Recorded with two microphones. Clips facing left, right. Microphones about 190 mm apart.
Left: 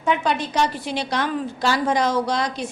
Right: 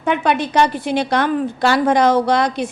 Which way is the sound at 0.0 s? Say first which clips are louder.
Right 4 dB; 60° right (ahead or behind).